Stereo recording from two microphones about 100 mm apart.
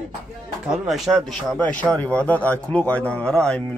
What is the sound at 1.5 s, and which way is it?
Speech, 15° left (ahead or behind).